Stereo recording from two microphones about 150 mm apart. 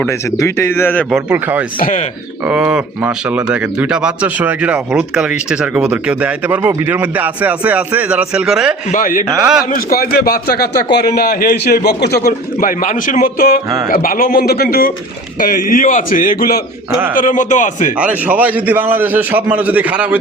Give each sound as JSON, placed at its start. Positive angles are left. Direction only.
{"t": 0.3, "sound": "a man's voice", "side_deg": 20}
{"t": 1.1, "sound": "speech", "side_deg": -10}
{"t": 1.8, "sound": "a man's voice", "side_deg": 55}
{"t": 2.5, "sound": "speech", "side_deg": -5}
{"t": 8.9, "sound": "a man's voice", "side_deg": 65}
{"t": 9.4, "sound": "speech", "side_deg": -5}
{"t": 9.7, "sound": "a man's voice", "side_deg": 90}
{"t": 17.2, "sound": "a man's voice", "side_deg": 60}
{"t": 18.0, "sound": "speech", "side_deg": -10}